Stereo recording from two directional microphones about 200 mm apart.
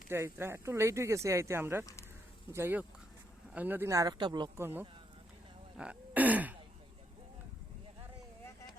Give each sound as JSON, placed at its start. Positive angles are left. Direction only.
{"t": 0.1, "sound": "speech", "side_deg": -10}
{"t": 1.8, "sound": "speech", "side_deg": 15}
{"t": 2.5, "sound": "speech", "side_deg": -10}
{"t": 5.7, "sound": "throat clearing", "side_deg": -5}